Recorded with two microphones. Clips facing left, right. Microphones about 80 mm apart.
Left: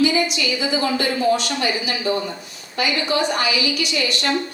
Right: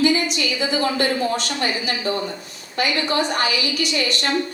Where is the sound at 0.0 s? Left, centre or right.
Right.